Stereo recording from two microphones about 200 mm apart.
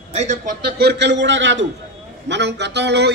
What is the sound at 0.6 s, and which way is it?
A man's voice, 55° right (ahead or behind).